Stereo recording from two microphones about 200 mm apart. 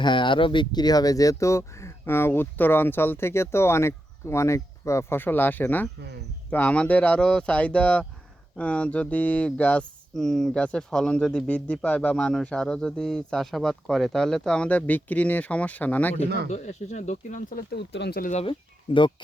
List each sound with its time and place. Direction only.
0.0 s speech: 25° left (ahead or behind); by 16.2 s 10° left (ahead or behind)
16.5 s speech: 35° left (ahead or behind); by 18.3 s 55° left (ahead or behind)
18.3 s speech: 30° left (ahead or behind)